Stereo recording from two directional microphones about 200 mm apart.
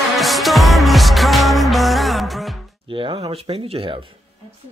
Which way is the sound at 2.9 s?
25° right (ahead or behind).